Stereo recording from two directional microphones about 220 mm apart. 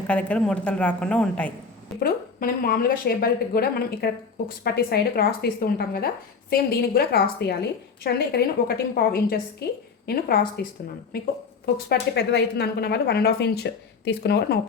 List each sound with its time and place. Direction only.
0.1 s a woman's voice: 5° left (ahead or behind)
2.0 s speech: 40° left (ahead or behind)